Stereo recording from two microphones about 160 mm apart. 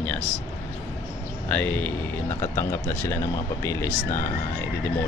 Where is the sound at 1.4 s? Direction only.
10° left (ahead or behind).